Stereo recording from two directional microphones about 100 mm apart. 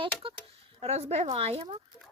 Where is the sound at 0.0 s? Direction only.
60° right (ahead or behind).